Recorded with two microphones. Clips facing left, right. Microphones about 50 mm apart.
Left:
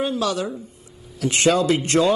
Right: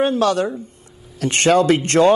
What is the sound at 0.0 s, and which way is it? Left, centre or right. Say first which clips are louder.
Speech: right 6 dB; right.